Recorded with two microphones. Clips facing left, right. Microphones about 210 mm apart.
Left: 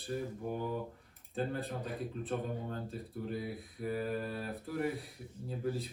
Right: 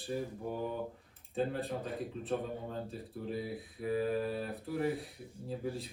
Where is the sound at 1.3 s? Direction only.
Centre (ahead or behind).